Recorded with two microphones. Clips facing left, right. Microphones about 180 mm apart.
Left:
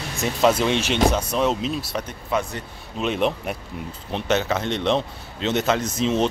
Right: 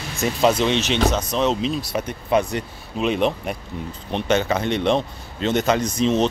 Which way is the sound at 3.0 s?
Centre (ahead or behind).